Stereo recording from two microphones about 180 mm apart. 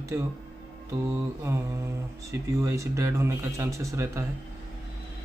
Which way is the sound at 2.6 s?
15° right (ahead or behind).